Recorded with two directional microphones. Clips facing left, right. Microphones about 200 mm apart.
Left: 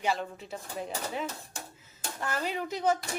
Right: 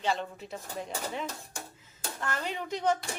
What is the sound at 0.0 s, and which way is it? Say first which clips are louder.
Speech: even; 5° left (ahead or behind).